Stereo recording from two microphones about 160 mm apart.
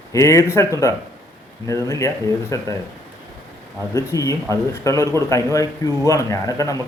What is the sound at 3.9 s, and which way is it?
Speech, 20° left (ahead or behind).